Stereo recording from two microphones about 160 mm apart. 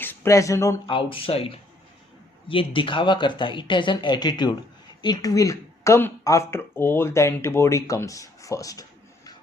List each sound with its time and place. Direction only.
0.0 s speech: 15° left (ahead or behind)
0.9 s speech: 35° left (ahead or behind)